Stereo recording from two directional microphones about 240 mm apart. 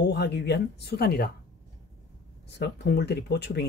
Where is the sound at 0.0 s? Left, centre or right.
Left.